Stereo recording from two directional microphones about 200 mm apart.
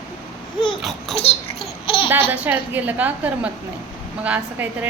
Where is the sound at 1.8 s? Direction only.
25° left (ahead or behind).